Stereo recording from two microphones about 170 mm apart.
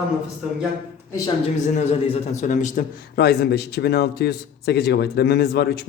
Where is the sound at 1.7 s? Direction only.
40° left (ahead or behind).